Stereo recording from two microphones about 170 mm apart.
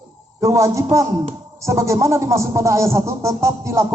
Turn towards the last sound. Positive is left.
turn(degrees=-15)  # may be behind; listen again after turning